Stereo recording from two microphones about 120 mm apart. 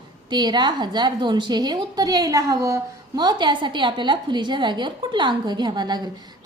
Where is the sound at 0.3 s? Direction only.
35° right (ahead or behind).